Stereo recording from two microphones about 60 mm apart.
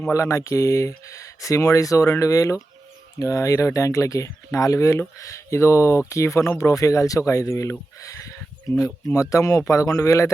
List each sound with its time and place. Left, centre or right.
0.1 s speech: left
4.9 s speech: left